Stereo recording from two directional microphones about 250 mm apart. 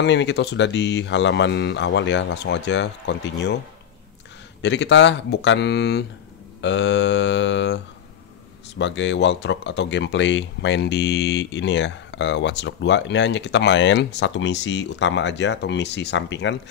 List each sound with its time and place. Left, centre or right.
0.0 s speech: left
4.6 s speech: left